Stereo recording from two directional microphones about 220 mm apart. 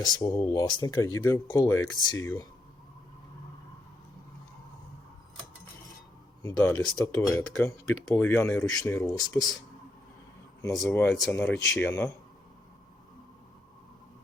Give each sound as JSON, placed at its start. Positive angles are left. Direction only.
{"t": 0.0, "sound": "speech", "side_deg": 20}
{"t": 6.6, "sound": "speech", "side_deg": 5}
{"t": 10.8, "sound": "speech", "side_deg": 10}